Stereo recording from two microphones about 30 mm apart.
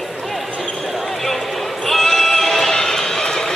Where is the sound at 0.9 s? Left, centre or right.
Centre.